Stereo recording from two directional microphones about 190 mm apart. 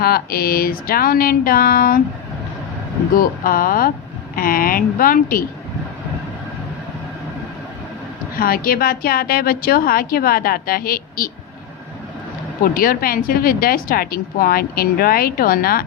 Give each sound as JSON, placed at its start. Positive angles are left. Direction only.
{"t": 0.0, "sound": "speech", "side_deg": 50}
{"t": 3.2, "sound": "speech", "side_deg": 50}
{"t": 8.4, "sound": "speech", "side_deg": 50}
{"t": 12.6, "sound": "speech", "side_deg": 50}